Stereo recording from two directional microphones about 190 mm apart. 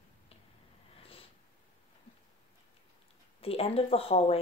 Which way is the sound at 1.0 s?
30° left (ahead or behind).